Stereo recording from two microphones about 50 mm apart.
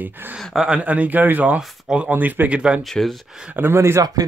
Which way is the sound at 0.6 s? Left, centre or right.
Right.